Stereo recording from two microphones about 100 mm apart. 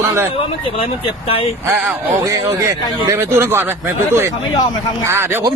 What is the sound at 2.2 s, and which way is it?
Speech, 35° right (ahead or behind).